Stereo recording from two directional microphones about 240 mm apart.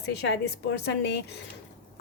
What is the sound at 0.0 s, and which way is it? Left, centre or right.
Speech, left.